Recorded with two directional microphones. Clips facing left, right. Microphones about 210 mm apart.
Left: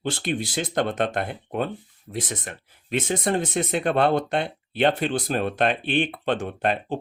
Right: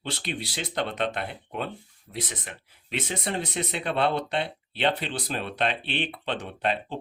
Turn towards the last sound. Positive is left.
turn(degrees=50)  # may be behind; listen again after turning